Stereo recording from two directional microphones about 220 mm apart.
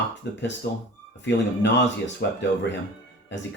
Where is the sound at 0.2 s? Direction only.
50° left (ahead or behind).